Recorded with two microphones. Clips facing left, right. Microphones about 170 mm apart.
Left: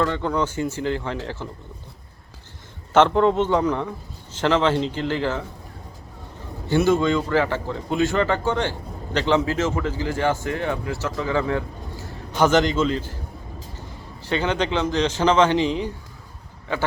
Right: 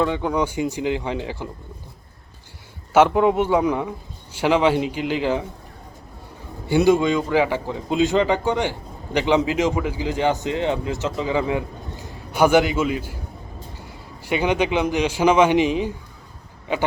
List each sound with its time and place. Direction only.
0.0 s a man's voice: 10° right (ahead or behind)
2.9 s a man's voice: 10° right (ahead or behind)
6.7 s a man's voice: 15° right (ahead or behind)